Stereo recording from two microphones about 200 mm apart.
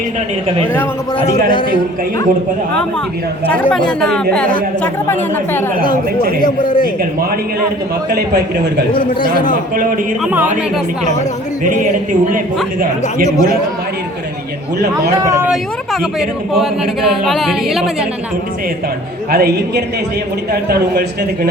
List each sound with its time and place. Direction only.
1.5 s a man's voice: 25° left (ahead or behind)
3.5 s speech: 5° left (ahead or behind)
6.4 s a man's voice: 45° left (ahead or behind)
8.1 s a man's voice: 55° right (ahead or behind)
10.2 s speech: 10° right (ahead or behind)
13.2 s speech: 15° left (ahead or behind)
15.2 s speech: 15° right (ahead or behind)
16.6 s speech: centre (ahead or behind)
19.3 s a man's voice: 50° right (ahead or behind)